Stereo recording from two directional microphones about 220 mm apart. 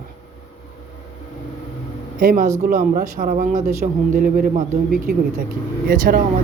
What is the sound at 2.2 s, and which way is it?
Speech, 40° right (ahead or behind).